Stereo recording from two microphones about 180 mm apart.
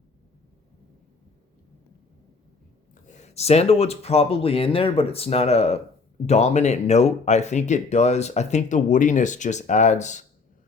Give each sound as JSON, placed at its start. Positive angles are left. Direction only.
{"t": 2.9, "sound": "speech", "side_deg": 40}